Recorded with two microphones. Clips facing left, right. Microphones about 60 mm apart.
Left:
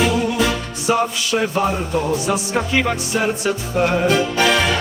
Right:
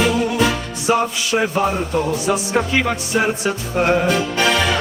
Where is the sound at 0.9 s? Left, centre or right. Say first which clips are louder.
Right 1 dB; centre.